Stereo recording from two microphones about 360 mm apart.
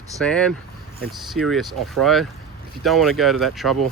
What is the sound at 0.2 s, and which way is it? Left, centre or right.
Speech, centre.